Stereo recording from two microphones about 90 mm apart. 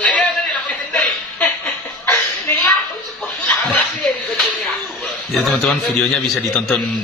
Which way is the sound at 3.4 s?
10° left (ahead or behind).